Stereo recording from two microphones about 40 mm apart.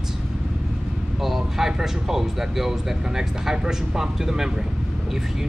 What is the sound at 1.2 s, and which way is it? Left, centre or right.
Speech, centre.